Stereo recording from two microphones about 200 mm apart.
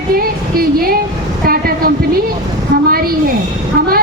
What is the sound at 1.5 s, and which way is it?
Train, 50° right (ahead or behind).